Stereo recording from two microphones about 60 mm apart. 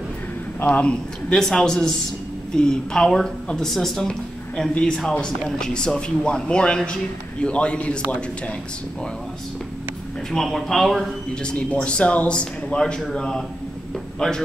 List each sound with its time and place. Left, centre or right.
0.7 s a man's voice: centre
1.3 s speech: centre
10.3 s speech: centre
11.4 s a man's voice: left